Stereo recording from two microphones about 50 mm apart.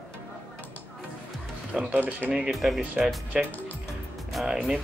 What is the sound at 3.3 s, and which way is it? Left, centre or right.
Speech, centre.